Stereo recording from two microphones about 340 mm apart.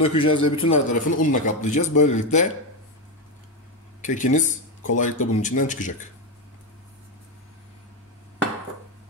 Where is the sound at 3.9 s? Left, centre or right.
Left.